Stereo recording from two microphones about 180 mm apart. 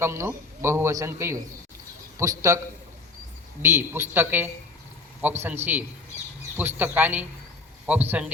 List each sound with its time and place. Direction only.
0.0 s a man's voice: 15° right (ahead or behind)
3.6 s a man's voice: 15° right (ahead or behind)